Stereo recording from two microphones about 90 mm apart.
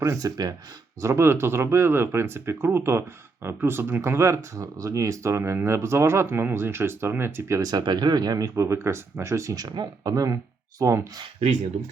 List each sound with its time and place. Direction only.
0.0 s speech: 35° right (ahead or behind)
1.0 s speech: 30° right (ahead or behind)
7.7 s speech: 50° right (ahead or behind)